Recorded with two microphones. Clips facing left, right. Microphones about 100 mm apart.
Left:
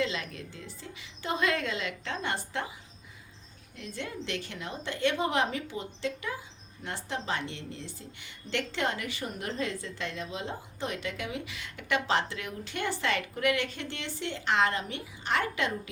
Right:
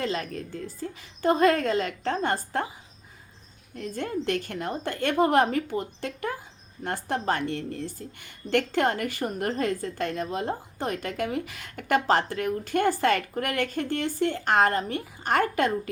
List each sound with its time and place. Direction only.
0.0 s a woman's voice: 45° right (ahead or behind)
3.8 s a woman's voice: 45° right (ahead or behind)